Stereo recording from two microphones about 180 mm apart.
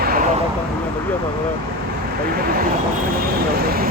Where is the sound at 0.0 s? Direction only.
55° right (ahead or behind).